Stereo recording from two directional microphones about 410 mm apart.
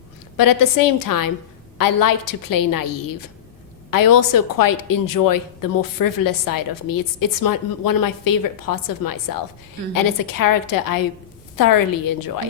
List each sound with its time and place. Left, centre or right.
0.3 s a woman's voice: left